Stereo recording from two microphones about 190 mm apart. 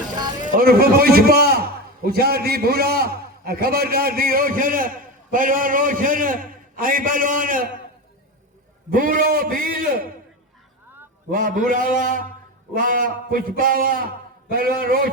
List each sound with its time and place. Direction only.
0.4 s a man's voice: 50° right (ahead or behind)
8.9 s a man's voice: 45° right (ahead or behind)
11.3 s a man's voice: 45° right (ahead or behind)